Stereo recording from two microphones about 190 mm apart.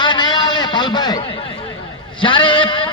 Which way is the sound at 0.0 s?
25° left (ahead or behind).